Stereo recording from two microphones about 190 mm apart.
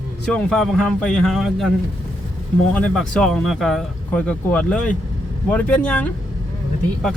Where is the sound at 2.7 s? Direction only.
5° left (ahead or behind).